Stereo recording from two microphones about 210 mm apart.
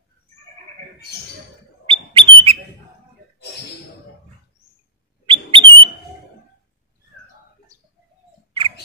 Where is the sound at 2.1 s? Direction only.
25° right (ahead or behind).